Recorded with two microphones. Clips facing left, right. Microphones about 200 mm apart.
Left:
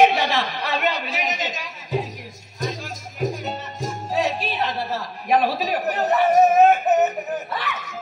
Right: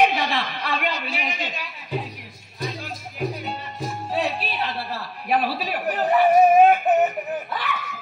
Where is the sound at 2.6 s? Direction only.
45° left (ahead or behind).